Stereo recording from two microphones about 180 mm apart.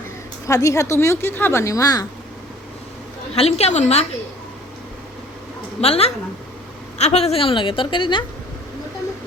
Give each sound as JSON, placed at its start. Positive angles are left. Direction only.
{"t": 0.4, "sound": "speech", "side_deg": 15}
{"t": 3.3, "sound": "a woman's voice", "side_deg": 35}
{"t": 5.8, "sound": "a woman's voice", "side_deg": 35}